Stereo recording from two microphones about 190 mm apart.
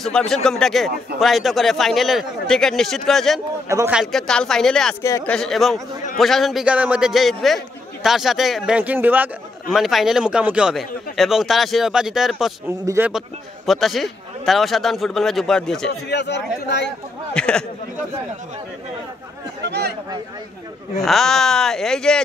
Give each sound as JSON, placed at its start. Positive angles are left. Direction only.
{"t": 0.0, "sound": "a man's voice", "side_deg": 5}
{"t": 3.6, "sound": "speech", "side_deg": -15}
{"t": 3.9, "sound": "a man's voice", "side_deg": 0}
{"t": 5.0, "sound": "speech", "side_deg": 15}
{"t": 5.3, "sound": "a man's voice", "side_deg": 0}
{"t": 12.6, "sound": "speech", "side_deg": -15}
{"t": 13.7, "sound": "a man's voice", "side_deg": 0}
{"t": 15.9, "sound": "speech", "side_deg": 65}
{"t": 17.3, "sound": "a man's voice", "side_deg": 5}
{"t": 19.6, "sound": "speech", "side_deg": -60}
{"t": 21.0, "sound": "a man's voice", "side_deg": 0}